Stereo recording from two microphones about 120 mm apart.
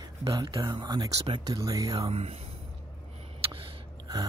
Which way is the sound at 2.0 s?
55° right (ahead or behind).